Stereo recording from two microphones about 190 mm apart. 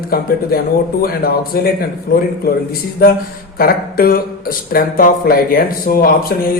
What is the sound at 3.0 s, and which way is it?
Speech, 50° left (ahead or behind).